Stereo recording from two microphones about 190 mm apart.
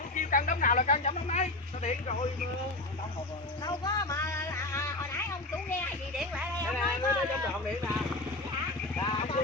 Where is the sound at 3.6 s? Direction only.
20° left (ahead or behind).